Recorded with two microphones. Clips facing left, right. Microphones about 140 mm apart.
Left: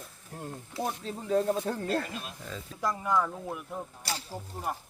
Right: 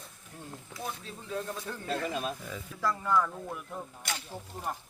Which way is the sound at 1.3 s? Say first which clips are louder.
Left 9 dB; 45° left (ahead or behind).